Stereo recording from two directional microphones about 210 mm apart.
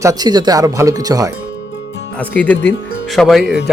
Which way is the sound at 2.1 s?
5° left (ahead or behind).